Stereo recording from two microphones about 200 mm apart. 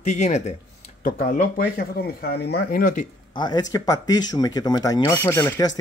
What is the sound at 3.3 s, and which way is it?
Speech, 20° left (ahead or behind).